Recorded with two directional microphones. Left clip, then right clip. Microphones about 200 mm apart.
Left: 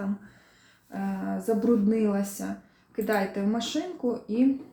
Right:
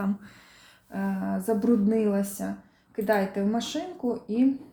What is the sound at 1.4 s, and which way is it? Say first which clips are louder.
Speech: left 1 dB; 35° right (ahead or behind).